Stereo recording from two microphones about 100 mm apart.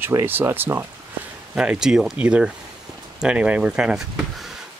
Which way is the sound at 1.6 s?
5° right (ahead or behind).